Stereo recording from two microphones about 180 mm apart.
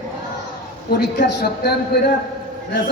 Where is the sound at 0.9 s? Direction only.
65° left (ahead or behind).